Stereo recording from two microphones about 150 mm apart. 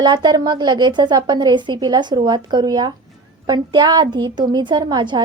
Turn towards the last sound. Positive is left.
turn(degrees=-30)  # may be behind; listen again after turning